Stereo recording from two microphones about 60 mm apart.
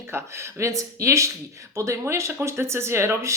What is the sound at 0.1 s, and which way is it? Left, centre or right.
Speech, right.